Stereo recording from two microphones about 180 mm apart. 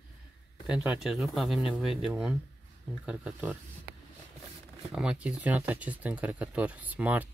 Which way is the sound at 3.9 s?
65° right (ahead or behind).